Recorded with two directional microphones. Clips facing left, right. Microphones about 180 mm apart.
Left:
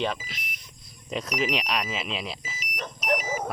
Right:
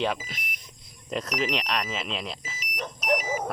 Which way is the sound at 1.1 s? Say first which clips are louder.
Even; centre (ahead or behind).